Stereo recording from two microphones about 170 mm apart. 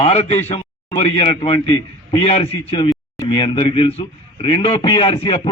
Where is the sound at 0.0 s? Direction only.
35° left (ahead or behind).